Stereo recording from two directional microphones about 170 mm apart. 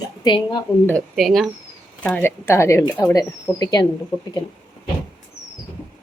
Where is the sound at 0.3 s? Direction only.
25° left (ahead or behind).